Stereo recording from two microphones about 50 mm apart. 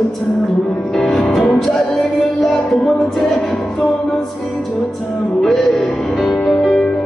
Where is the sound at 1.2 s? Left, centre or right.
Centre.